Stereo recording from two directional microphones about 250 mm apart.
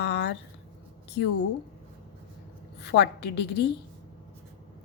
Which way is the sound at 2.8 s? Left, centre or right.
Left.